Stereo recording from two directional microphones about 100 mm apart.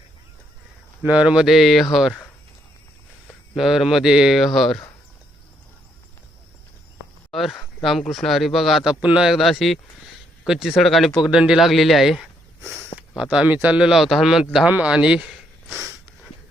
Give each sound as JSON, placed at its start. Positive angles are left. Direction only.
{"t": 1.0, "sound": "speech", "side_deg": -10}
{"t": 3.5, "sound": "speech", "side_deg": 0}
{"t": 7.3, "sound": "speech", "side_deg": 0}
{"t": 13.3, "sound": "speech", "side_deg": -15}